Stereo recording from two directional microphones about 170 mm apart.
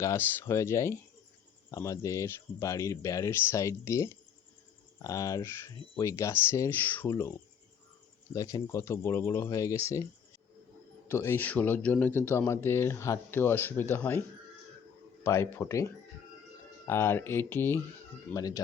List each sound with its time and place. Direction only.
0.0 s speech: 15° left (ahead or behind)
11.1 s speech: 15° left (ahead or behind)